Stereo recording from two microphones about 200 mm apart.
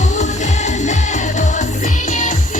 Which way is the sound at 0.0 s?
35° left (ahead or behind).